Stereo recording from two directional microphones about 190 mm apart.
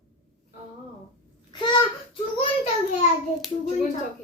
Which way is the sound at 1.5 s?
25° left (ahead or behind).